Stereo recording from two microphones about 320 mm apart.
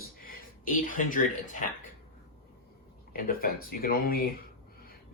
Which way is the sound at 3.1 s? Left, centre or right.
Left.